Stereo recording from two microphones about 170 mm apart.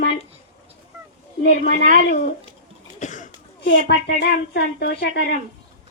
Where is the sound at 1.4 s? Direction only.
85° left; by 2.2 s 70° left (ahead or behind).